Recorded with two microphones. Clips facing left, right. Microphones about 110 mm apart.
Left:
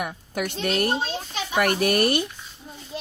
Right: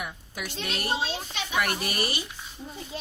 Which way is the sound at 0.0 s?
60° left (ahead or behind).